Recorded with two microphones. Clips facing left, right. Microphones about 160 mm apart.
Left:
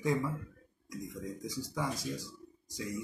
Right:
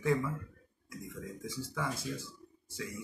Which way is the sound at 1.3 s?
40° left (ahead or behind).